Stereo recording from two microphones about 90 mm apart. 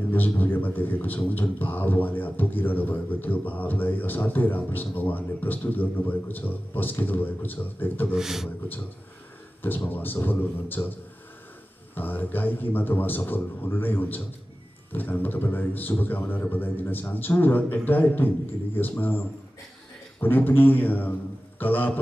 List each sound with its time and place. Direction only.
0.1 s a man's voice: 20° left (ahead or behind)
8.1 s a man's voice: 5° right (ahead or behind)
9.8 s a man's voice: 20° left (ahead or behind)